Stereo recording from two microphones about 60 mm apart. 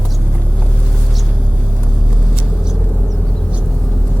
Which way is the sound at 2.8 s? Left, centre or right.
Left.